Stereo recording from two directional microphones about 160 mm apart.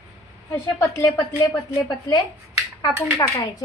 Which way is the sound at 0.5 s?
15° left (ahead or behind).